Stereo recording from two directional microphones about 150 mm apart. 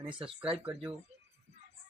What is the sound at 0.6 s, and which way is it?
Speech, 10° right (ahead or behind).